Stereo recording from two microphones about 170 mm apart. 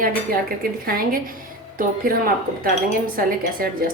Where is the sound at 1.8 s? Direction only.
55° right (ahead or behind).